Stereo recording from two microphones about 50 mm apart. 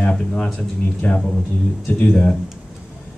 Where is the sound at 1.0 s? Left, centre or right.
Left.